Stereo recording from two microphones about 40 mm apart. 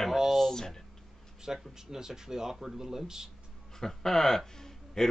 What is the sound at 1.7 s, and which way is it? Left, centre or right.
Speech, centre.